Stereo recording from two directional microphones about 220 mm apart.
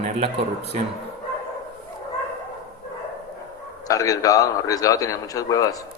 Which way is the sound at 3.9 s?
15° left (ahead or behind).